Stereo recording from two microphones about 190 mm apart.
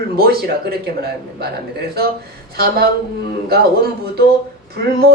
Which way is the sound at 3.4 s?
55° right (ahead or behind).